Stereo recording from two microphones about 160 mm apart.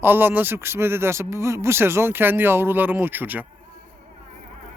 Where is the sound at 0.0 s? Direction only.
15° right (ahead or behind).